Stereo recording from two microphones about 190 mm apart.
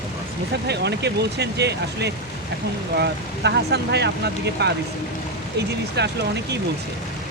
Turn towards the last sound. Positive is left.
turn(degrees=-60)  # may be behind; listen again after turning